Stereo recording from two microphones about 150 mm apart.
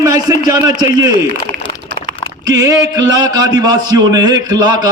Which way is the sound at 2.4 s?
25° right (ahead or behind).